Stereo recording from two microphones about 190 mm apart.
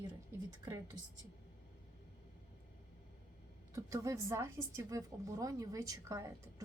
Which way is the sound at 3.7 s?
15° right (ahead or behind).